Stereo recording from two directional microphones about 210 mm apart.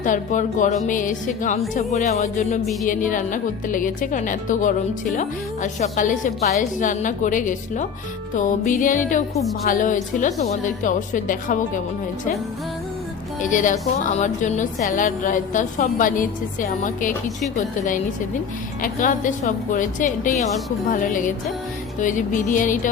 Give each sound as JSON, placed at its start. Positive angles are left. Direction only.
{"t": 0.0, "sound": "a woman's voice", "side_deg": 35}
{"t": 13.4, "sound": "a woman's voice", "side_deg": 35}
{"t": 18.8, "sound": "a woman's voice", "side_deg": 40}